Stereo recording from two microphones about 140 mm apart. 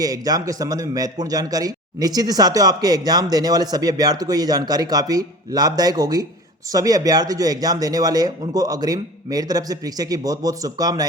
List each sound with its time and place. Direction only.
0.0 s a man's voice: 25° right (ahead or behind)